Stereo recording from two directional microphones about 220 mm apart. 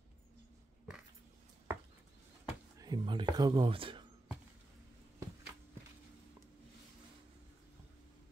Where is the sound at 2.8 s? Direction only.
20° right (ahead or behind).